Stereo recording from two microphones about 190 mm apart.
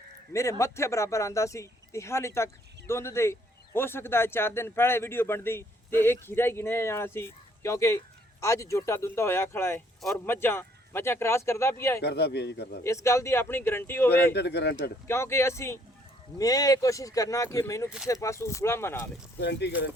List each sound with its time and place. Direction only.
0.3 s a man's voice: 15° left (ahead or behind)
12.0 s speech: 60° left (ahead or behind)
12.8 s a man's voice: 15° left (ahead or behind)
14.3 s speech: 60° left (ahead or behind)
15.0 s a man's voice: 15° left (ahead or behind)
19.4 s speech: 65° left (ahead or behind)